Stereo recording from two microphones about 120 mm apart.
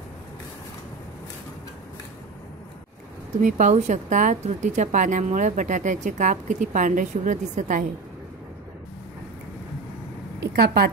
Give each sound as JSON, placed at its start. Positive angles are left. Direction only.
{"t": 3.3, "sound": "a woman's voice", "side_deg": -90}